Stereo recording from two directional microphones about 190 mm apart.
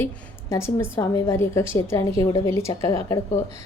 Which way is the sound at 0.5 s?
15° left (ahead or behind).